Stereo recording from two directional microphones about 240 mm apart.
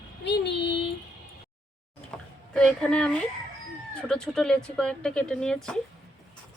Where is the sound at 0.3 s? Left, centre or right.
Left.